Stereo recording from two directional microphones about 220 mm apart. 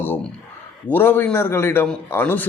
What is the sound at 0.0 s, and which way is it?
A man's voice, 10° left (ahead or behind).